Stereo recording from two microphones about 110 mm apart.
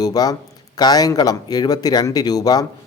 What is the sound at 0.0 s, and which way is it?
Speech, 35° left (ahead or behind).